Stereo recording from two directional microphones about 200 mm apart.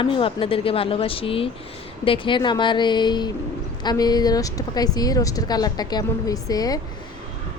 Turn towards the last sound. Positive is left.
turn(degrees=20)  # may be behind; listen again after turning